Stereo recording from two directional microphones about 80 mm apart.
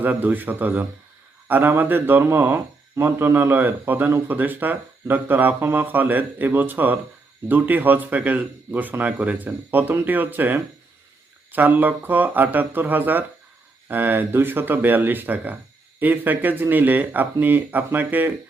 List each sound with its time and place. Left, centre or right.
0.0 s a man's voice: right